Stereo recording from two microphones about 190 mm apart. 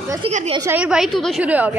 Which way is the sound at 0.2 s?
30° right (ahead or behind).